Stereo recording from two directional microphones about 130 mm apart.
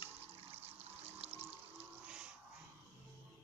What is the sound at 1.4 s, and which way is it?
Music, 10° right (ahead or behind).